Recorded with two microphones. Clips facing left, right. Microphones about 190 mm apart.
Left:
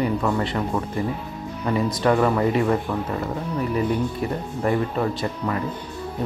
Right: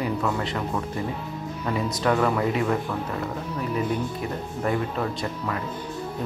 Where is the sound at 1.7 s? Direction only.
Centre (ahead or behind).